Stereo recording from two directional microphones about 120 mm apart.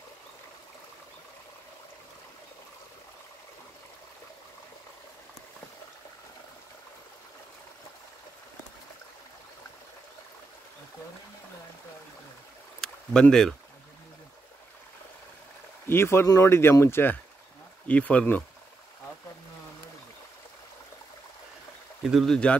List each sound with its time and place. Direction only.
12.8 s speech: 5° left (ahead or behind)
15.9 s speech: 20° left (ahead or behind)
22.0 s speech: centre (ahead or behind)